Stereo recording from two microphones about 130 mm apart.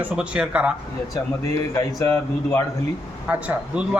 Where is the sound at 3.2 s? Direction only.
10° right (ahead or behind).